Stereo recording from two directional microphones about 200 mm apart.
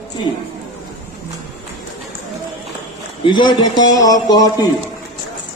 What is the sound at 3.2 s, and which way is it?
A man's voice, 25° left (ahead or behind).